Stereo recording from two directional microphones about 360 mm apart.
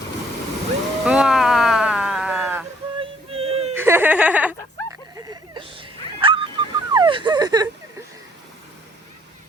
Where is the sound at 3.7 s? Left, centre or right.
Centre.